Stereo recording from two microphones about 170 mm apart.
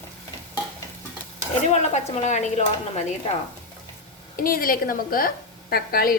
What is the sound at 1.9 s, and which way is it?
Speech, 45° left (ahead or behind).